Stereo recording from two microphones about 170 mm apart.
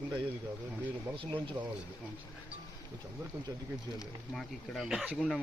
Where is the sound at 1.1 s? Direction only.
30° right (ahead or behind).